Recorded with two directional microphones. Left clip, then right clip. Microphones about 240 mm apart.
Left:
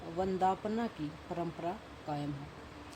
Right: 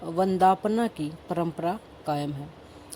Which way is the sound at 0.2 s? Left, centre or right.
Right.